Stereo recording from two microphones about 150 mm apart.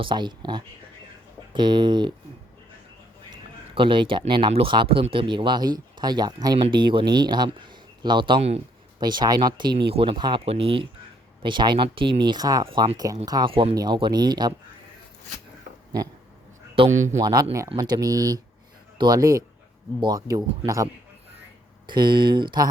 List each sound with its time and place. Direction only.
0.0 s speech: 30° right (ahead or behind)
3.8 s speech: 35° right (ahead or behind)
8.4 s speech: 45° right (ahead or behind)
9.0 s speech: 30° right (ahead or behind)
12.6 s speech: 35° right (ahead or behind)
13.5 s speech: 40° right (ahead or behind)
17.2 s speech: 25° right (ahead or behind)